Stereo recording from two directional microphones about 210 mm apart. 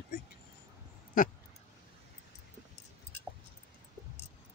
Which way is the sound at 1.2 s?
40° left (ahead or behind).